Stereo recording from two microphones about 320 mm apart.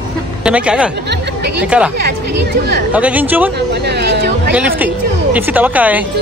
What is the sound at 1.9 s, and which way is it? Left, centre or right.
Speech, right.